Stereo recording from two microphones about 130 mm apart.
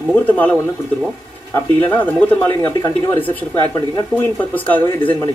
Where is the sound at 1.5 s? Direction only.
15° left (ahead or behind).